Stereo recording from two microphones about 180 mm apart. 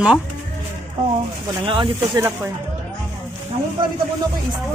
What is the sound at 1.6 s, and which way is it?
Speech, 30° right (ahead or behind).